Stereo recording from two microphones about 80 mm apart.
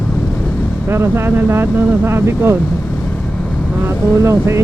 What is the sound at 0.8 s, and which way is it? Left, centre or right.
Speech, right.